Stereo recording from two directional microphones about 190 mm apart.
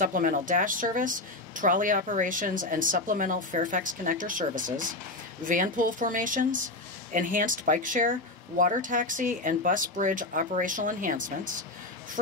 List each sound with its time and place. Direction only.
0.0 s speech: 45° right (ahead or behind)